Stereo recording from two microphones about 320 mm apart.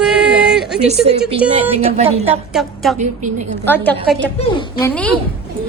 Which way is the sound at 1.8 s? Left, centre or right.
Centre.